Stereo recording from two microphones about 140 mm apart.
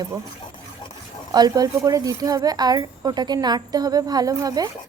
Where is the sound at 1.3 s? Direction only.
30° right (ahead or behind).